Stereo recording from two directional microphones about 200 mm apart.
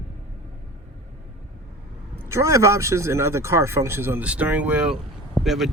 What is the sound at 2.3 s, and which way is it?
Speech, 15° right (ahead or behind).